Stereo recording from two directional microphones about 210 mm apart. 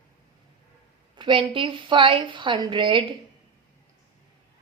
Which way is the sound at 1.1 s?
25° right (ahead or behind).